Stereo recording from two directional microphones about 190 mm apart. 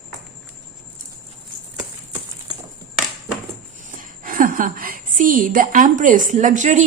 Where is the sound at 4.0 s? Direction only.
45° right (ahead or behind).